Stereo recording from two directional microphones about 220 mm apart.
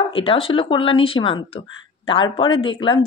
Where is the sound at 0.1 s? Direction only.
25° left (ahead or behind).